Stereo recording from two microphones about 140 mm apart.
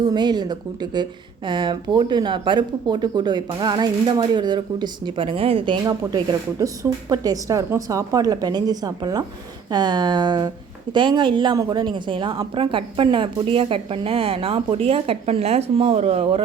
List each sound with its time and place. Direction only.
0.0 s a woman's voice: 30° right (ahead or behind); by 16.4 s 45° right (ahead or behind)